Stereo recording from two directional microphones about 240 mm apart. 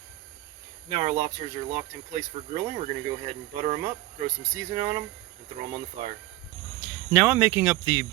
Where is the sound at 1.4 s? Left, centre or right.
Right.